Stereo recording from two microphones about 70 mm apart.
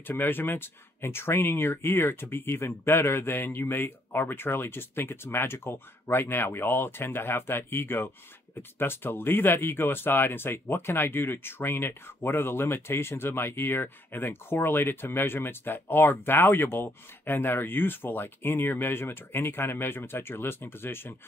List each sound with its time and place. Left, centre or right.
0.0 s speech: left